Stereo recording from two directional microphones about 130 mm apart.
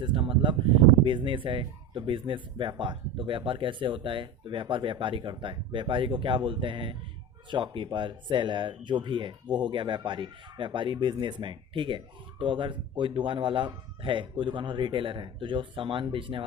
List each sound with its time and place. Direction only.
0.0 s speech: 40° right (ahead or behind)